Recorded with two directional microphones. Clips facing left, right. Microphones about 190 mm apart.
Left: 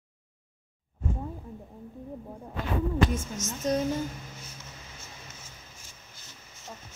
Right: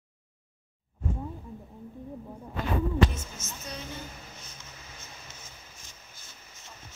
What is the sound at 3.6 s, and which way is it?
Speech, 40° left (ahead or behind).